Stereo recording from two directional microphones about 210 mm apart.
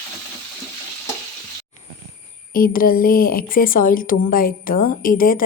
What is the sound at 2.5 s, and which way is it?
A woman's voice, 45° left (ahead or behind).